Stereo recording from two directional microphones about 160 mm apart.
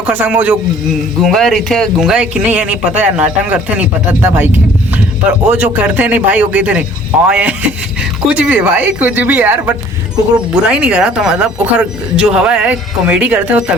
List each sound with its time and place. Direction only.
0.0 s speech: 10° right (ahead or behind)
1.2 s speech: centre (ahead or behind)